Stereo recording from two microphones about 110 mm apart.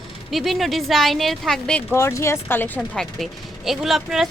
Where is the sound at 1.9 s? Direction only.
25° left (ahead or behind).